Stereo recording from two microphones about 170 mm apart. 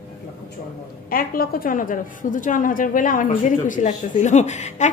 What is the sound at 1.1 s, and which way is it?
A woman's voice, 60° left (ahead or behind).